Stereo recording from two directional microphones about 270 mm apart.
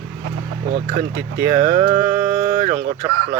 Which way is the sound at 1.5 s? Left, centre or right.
Right.